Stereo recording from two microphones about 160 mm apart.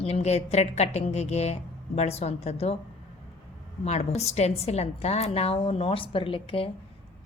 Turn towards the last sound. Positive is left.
turn(degrees=35)  # may be behind; listen again after turning